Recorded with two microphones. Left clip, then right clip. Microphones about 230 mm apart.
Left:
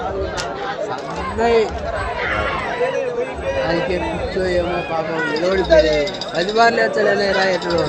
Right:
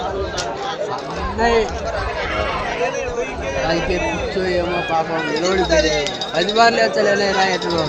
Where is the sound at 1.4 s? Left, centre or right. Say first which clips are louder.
Left 1 dB; centre.